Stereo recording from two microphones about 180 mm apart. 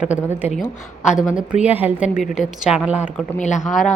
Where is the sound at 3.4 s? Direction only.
40° left (ahead or behind).